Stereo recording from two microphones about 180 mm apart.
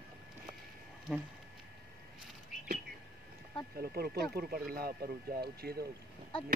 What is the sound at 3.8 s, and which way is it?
Speech, 60° right (ahead or behind).